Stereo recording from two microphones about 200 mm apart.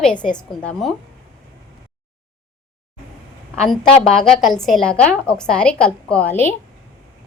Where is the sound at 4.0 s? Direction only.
5° left (ahead or behind).